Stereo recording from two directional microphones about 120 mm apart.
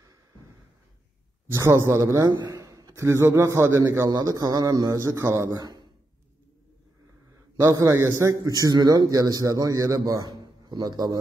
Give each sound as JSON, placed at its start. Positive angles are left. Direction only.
{"t": 1.5, "sound": "a man's voice", "side_deg": -25}
{"t": 7.6, "sound": "a man's voice", "side_deg": -25}